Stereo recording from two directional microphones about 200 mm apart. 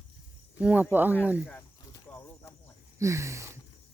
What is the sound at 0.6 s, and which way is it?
Speech, 10° right (ahead or behind).